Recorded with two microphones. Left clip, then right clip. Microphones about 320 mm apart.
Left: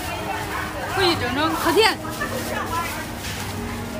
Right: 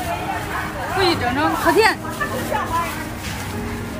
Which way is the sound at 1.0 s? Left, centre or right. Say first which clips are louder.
Right 2 dB; centre.